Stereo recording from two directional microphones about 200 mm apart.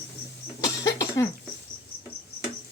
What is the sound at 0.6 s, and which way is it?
Cough, 15° left (ahead or behind).